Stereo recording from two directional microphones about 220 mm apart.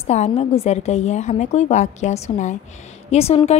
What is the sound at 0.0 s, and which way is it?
A woman's voice, 30° left (ahead or behind).